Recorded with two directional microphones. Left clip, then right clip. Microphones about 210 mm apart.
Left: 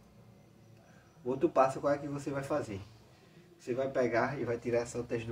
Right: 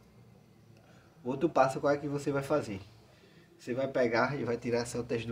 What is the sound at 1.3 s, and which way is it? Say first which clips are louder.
Speech: right 1 dB; 40° right (ahead or behind).